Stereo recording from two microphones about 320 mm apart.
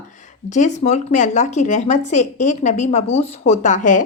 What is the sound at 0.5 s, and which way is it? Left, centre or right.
Speech, left.